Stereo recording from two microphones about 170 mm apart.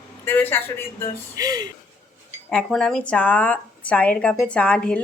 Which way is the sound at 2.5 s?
5° left (ahead or behind).